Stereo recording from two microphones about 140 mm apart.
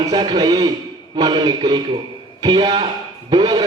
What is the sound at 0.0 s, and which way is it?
A man's voice, 30° right (ahead or behind).